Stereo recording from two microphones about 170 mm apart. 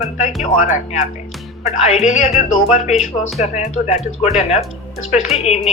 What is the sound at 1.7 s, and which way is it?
Speech, 40° left (ahead or behind).